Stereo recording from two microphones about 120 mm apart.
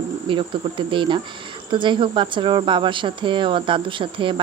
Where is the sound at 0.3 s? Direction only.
45° right (ahead or behind).